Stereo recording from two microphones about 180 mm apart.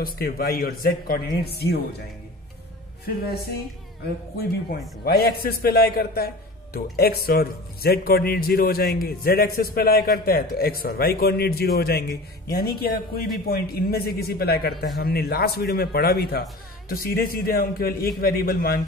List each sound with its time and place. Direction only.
0.0 s a man's voice: 55° left (ahead or behind)
4.4 s a man's voice: 60° left (ahead or behind)